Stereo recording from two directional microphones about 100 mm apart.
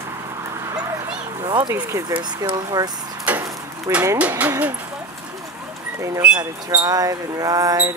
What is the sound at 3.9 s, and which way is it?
Speech, 30° right (ahead or behind).